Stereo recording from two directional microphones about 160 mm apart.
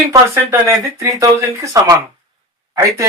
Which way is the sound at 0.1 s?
20° right (ahead or behind).